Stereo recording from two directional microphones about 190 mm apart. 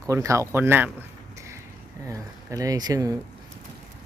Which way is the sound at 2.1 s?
15° right (ahead or behind).